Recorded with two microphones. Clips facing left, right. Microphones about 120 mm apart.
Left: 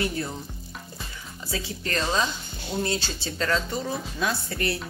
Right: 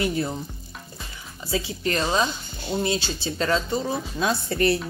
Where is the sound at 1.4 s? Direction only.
15° right (ahead or behind).